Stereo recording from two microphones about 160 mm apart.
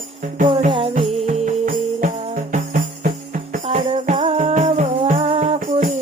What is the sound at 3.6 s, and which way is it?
Music, 45° right (ahead or behind).